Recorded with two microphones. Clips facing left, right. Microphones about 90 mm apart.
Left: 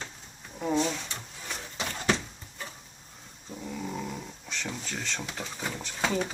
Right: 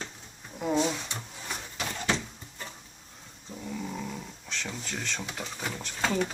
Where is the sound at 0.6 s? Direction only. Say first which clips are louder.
Right 1 dB; 10° right (ahead or behind).